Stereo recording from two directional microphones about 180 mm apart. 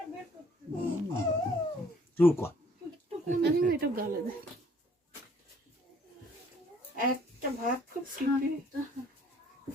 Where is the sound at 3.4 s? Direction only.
60° right (ahead or behind).